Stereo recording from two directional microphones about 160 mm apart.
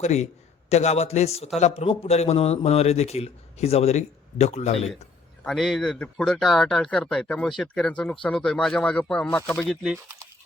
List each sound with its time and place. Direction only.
0.0 s a man's voice: 45° left (ahead or behind)
5.4 s speech: centre (ahead or behind)